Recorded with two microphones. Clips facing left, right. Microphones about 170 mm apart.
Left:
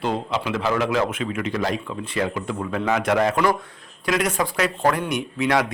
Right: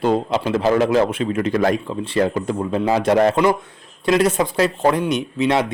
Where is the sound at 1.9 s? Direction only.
30° right (ahead or behind).